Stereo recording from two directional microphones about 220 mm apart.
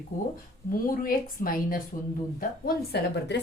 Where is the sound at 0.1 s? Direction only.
35° left (ahead or behind).